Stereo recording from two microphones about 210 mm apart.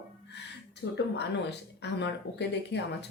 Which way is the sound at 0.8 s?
70° left (ahead or behind).